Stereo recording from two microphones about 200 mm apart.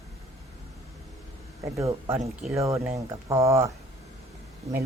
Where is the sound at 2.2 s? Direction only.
Centre (ahead or behind).